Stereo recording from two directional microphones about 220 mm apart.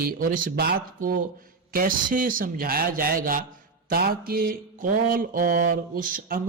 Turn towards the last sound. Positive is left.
turn(degrees=-40)  # may be behind; listen again after turning